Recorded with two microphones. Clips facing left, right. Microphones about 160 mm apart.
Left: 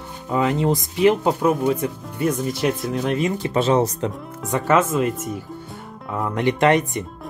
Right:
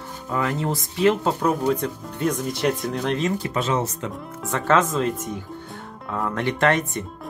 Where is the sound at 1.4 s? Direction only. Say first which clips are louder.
Left 2 dB; 5° left (ahead or behind).